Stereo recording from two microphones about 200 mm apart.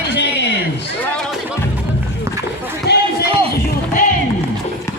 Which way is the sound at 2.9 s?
55° left (ahead or behind).